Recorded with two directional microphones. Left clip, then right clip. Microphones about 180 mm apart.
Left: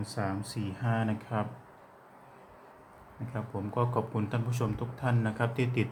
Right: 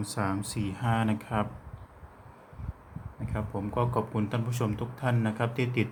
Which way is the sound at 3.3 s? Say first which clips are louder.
Right 3 dB; 15° right (ahead or behind).